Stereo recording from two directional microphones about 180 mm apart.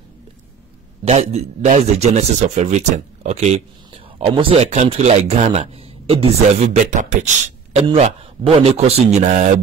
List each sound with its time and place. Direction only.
1.0 s speech: 35° right (ahead or behind)
7.9 s speech: 35° right (ahead or behind)